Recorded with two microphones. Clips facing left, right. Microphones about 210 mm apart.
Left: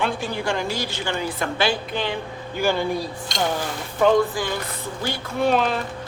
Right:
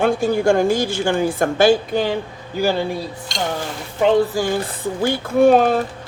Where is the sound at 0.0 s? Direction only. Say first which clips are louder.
Right 9 dB; 45° right (ahead or behind).